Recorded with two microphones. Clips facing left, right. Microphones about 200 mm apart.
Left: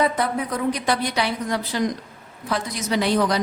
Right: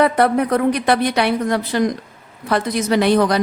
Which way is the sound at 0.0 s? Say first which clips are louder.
Right 7 dB; 65° right (ahead or behind).